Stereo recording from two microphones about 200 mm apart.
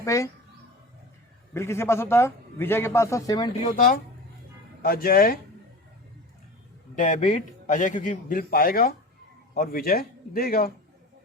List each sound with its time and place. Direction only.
0.0 s speech: 15° left (ahead or behind)
1.5 s a man's voice: 15° left (ahead or behind)
3.6 s a man's voice: 45° left (ahead or behind)
6.9 s a man's voice: 40° left (ahead or behind)